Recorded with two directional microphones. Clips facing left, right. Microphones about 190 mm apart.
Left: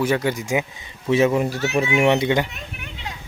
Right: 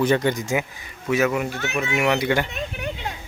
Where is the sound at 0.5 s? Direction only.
25° left (ahead or behind).